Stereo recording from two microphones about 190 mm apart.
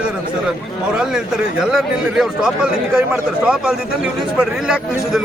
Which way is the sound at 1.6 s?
5° right (ahead or behind).